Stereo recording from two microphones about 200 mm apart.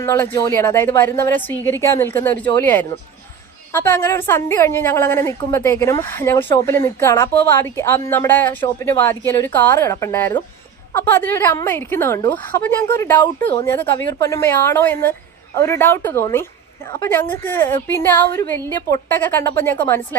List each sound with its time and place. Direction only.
0.0 s a woman's voice: 15° left (ahead or behind)